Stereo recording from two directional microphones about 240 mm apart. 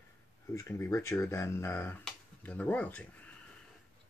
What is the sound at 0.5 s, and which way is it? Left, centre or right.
Speech, centre.